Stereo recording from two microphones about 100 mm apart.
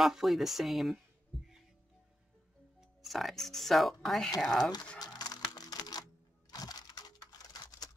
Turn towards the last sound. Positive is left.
turn(degrees=40)  # may be behind; listen again after turning